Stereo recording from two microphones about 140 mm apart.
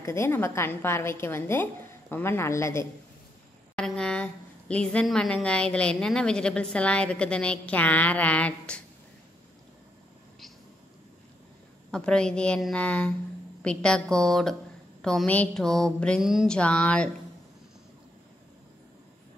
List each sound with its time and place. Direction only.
0.0 s a woman's voice: 20° left (ahead or behind)
3.7 s a woman's voice: 5° left (ahead or behind)
11.9 s a woman's voice: 5° left (ahead or behind)
16.5 s a woman's voice: 10° left (ahead or behind)